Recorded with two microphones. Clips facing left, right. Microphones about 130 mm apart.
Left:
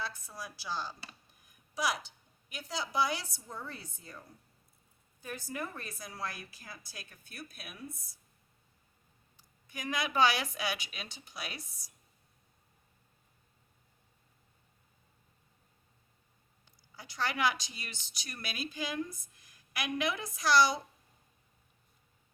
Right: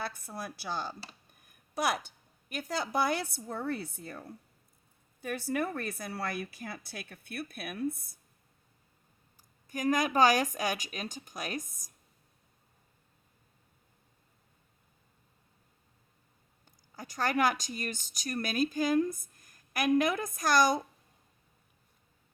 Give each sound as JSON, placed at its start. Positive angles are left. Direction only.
{"t": 0.0, "sound": "a woman's voice", "side_deg": -60}
{"t": 9.4, "sound": "speech", "side_deg": -45}
{"t": 16.9, "sound": "speech", "side_deg": -45}